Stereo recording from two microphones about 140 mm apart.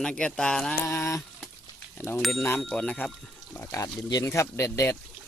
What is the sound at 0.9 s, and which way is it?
Speech, 20° left (ahead or behind).